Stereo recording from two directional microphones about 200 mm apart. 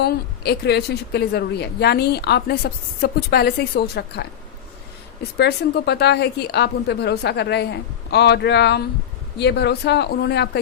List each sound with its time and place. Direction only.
0.0 s a woman's voice: 55° left (ahead or behind)
5.4 s speech: 55° left (ahead or behind)